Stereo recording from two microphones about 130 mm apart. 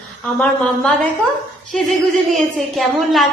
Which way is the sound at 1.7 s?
5° left (ahead or behind).